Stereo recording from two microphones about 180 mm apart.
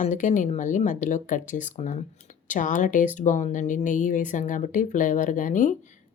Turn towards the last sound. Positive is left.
turn(degrees=45)  # may be behind; listen again after turning